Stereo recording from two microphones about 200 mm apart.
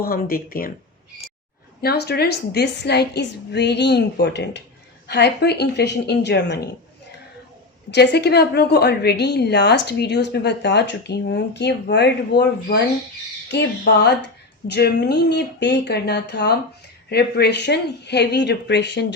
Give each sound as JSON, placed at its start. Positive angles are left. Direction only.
{"t": 0.0, "sound": "speech", "side_deg": 50}
{"t": 1.8, "sound": "a woman's voice", "side_deg": 55}
{"t": 7.9, "sound": "a woman's voice", "side_deg": 60}